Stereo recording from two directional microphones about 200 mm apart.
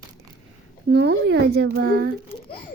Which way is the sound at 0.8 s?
60° right (ahead or behind).